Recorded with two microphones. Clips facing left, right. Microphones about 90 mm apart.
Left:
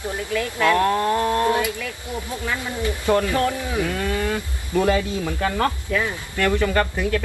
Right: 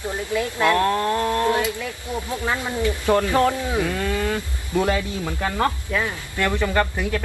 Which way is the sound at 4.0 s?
15° left (ahead or behind).